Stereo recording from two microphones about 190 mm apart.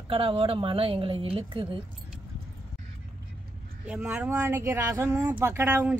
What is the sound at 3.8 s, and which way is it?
Speech, 5° right (ahead or behind).